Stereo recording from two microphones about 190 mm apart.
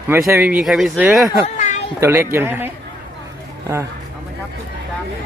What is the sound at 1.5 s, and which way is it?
Children playing, 40° left (ahead or behind).